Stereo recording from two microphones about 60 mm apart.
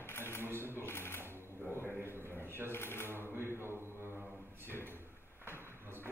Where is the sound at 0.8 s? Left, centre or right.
Left.